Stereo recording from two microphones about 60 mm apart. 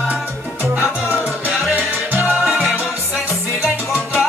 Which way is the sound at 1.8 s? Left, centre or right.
Right.